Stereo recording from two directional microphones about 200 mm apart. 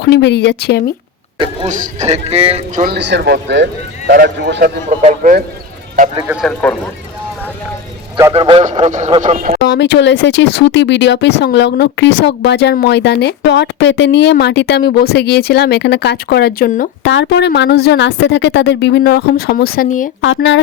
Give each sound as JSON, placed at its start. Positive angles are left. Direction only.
{"t": 0.0, "sound": "speech", "side_deg": 60}
{"t": 1.6, "sound": "speech", "side_deg": -40}
{"t": 2.8, "sound": "speech", "side_deg": -55}
{"t": 4.9, "sound": "speech", "side_deg": -40}
{"t": 6.2, "sound": "speech", "side_deg": 0}
{"t": 8.3, "sound": "speech", "side_deg": -25}
{"t": 9.6, "sound": "speech", "side_deg": 60}
{"t": 17.0, "sound": "speech", "side_deg": 65}
{"t": 20.2, "sound": "speech", "side_deg": 65}